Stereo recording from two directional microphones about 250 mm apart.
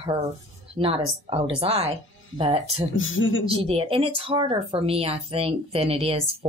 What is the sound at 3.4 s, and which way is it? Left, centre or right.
Speech, right.